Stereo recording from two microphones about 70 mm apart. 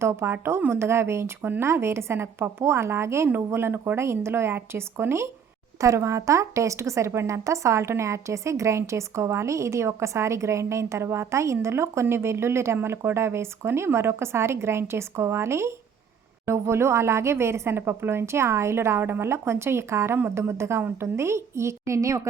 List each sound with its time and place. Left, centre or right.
0.0 s speech: right
1.4 s speech: right
1.6 s speech: right